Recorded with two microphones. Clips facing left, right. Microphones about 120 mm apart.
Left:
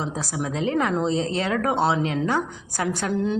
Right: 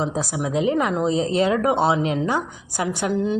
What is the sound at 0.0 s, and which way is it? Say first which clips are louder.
A woman's voice: right 4 dB; 20° right (ahead or behind).